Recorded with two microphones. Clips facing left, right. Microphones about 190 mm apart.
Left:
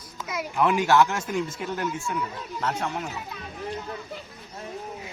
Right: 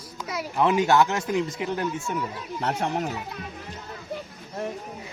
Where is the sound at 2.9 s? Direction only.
40° right (ahead or behind).